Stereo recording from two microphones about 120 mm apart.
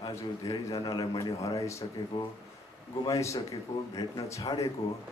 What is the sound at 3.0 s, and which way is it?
A man's voice, 25° left (ahead or behind).